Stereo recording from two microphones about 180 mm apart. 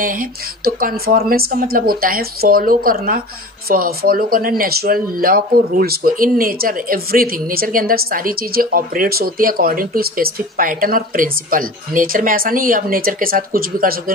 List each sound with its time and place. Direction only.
0.0 s speech: 50° right (ahead or behind)